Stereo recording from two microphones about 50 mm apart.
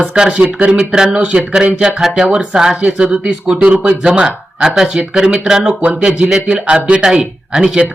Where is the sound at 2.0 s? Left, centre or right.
Centre.